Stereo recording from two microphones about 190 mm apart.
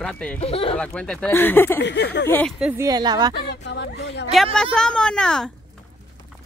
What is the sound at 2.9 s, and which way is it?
Speech, 20° right (ahead or behind).